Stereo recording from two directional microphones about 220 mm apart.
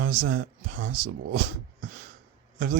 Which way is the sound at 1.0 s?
40° right (ahead or behind).